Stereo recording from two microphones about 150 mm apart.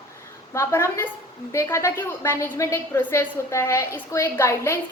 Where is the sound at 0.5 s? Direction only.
20° left (ahead or behind).